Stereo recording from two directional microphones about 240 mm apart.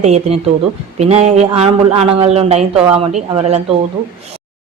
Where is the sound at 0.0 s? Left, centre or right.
Right.